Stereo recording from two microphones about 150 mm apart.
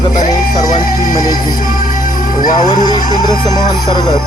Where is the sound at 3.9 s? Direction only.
30° left (ahead or behind).